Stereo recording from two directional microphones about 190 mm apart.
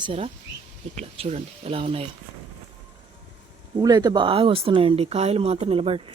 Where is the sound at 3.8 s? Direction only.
20° right (ahead or behind).